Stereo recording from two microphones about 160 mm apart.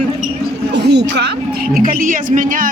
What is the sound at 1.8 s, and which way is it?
Speech, 60° right (ahead or behind).